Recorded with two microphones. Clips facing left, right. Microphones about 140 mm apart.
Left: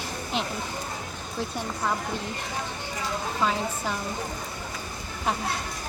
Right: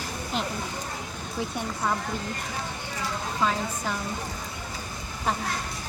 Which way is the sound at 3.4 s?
5° left (ahead or behind).